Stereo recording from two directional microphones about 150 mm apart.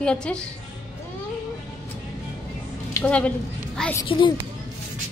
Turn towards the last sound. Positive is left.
turn(degrees=35)  # may be behind; listen again after turning